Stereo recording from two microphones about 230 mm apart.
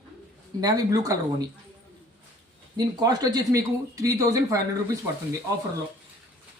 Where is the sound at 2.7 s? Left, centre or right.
Centre.